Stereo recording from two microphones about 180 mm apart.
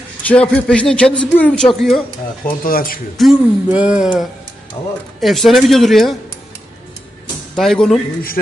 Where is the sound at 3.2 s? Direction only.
5° right (ahead or behind).